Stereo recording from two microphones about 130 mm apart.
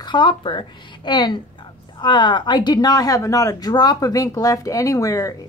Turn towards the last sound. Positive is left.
turn(degrees=25)  # may be behind; listen again after turning